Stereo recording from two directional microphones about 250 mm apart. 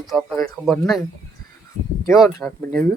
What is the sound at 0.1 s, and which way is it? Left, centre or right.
Speech, centre.